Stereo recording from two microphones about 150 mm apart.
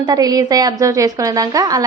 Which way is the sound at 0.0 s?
25° right (ahead or behind).